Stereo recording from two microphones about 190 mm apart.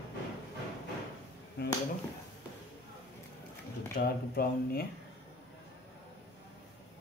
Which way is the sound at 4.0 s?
55° left (ahead or behind).